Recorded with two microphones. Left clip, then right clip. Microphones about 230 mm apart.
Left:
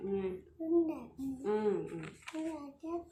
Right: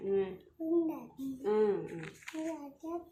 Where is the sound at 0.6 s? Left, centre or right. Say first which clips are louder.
Right 1 dB; centre.